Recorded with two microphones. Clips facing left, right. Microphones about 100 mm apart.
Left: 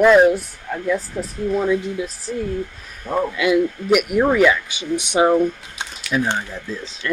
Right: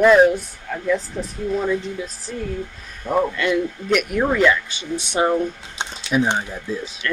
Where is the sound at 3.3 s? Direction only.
10° left (ahead or behind).